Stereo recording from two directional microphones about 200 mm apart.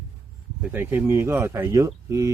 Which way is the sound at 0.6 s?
10° right (ahead or behind).